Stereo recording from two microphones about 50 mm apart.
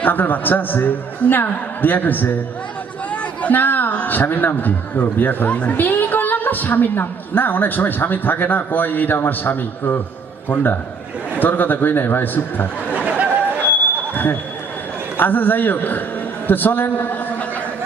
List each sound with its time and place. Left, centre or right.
0.0 s a woman's voice: left
3.1 s chatter: left
3.9 s a woman's voice: left
5.5 s a woman's voice: left
5.7 s a woman's voice: left
12.9 s a sound: right
14.1 s a sound: left
15.2 s a woman's voice: left